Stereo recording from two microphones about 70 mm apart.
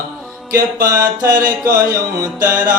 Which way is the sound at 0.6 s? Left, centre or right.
Right.